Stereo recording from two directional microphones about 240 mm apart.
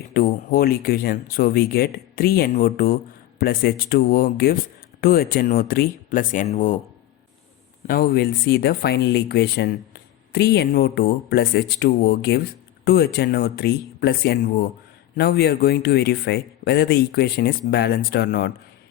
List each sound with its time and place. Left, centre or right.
0.1 s speech: left
7.9 s speech: left